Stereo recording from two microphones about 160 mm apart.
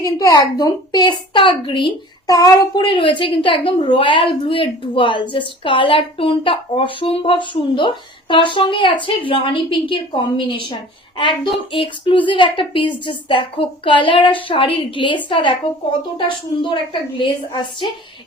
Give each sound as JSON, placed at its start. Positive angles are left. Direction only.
{"t": 0.0, "sound": "a woman's voice", "side_deg": 20}